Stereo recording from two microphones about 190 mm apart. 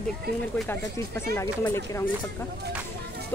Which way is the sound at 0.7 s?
15° left (ahead or behind).